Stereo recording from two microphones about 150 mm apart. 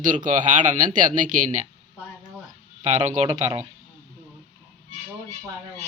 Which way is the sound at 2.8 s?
50° right (ahead or behind).